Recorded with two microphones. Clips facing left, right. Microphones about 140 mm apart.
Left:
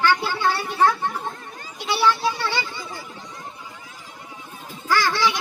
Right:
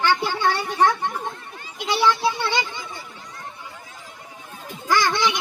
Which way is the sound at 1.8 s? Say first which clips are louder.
Right 1 dB; 15° right (ahead or behind).